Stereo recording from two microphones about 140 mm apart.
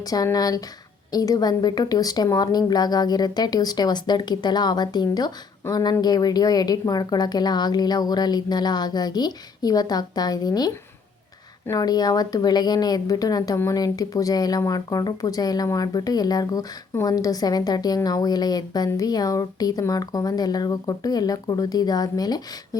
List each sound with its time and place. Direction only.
0.1 s a woman's voice: 25° left (ahead or behind)